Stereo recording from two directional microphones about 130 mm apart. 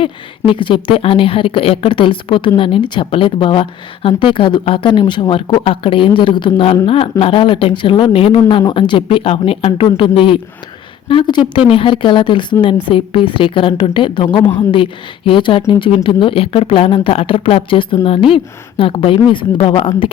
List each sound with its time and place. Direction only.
0.0 s a woman's voice: 40° left (ahead or behind)